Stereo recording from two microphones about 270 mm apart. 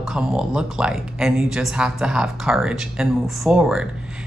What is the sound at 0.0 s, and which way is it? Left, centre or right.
Speech, centre.